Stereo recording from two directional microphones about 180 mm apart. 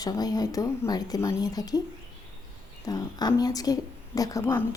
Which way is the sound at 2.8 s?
20° left (ahead or behind).